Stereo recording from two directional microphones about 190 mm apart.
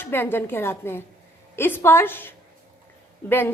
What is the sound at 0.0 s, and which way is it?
A woman's voice, 10° left (ahead or behind).